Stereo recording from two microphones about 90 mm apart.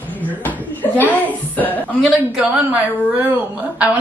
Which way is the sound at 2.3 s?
15° right (ahead or behind).